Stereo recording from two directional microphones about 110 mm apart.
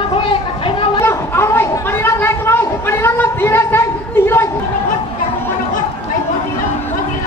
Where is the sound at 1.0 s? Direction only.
20° left (ahead or behind).